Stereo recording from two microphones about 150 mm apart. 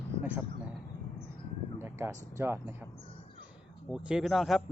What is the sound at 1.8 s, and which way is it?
Speech, 15° right (ahead or behind).